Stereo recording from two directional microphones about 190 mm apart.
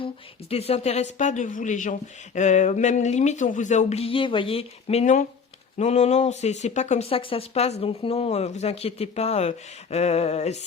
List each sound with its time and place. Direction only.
0.5 s speech: 30° left (ahead or behind)